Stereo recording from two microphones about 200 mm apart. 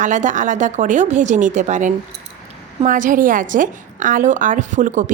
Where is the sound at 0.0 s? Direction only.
40° right (ahead or behind).